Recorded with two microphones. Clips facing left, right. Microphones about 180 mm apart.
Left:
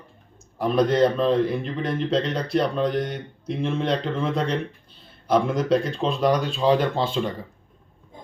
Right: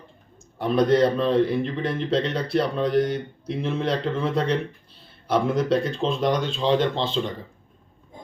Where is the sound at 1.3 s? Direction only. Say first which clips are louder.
Even; 30° right (ahead or behind).